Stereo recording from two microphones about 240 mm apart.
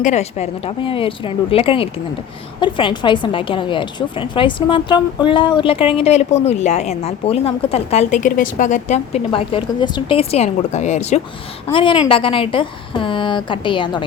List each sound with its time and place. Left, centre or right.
0.0 s a woman's voice: left